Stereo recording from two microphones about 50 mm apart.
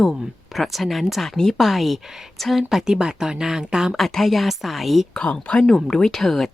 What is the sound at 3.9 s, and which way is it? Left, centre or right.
A woman's voice, centre.